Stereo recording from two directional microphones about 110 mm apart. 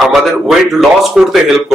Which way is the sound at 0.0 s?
Centre (ahead or behind).